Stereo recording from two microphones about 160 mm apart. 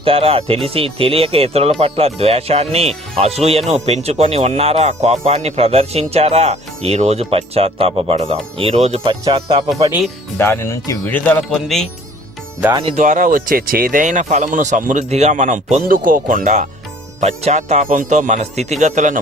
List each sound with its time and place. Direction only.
0.0 s speech: 35° right (ahead or behind)
9.7 s speech: 20° right (ahead or behind)
10.3 s speech: 15° left (ahead or behind)
12.8 s speech: 50° right (ahead or behind)